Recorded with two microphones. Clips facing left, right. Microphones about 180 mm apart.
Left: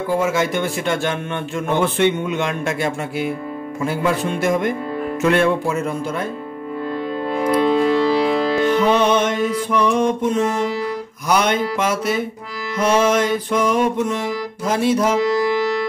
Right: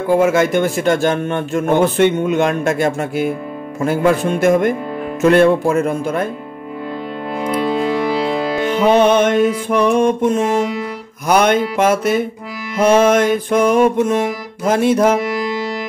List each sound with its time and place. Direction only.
0.1 s a man's voice: 55° right (ahead or behind)
7.8 s music: 15° right (ahead or behind)
8.9 s a man's voice: 50° right (ahead or behind)